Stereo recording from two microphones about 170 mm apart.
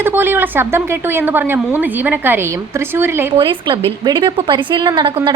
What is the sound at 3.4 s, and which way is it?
A woman's voice, 30° right (ahead or behind).